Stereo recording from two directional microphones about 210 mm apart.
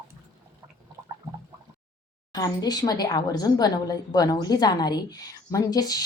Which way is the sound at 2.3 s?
20° left (ahead or behind).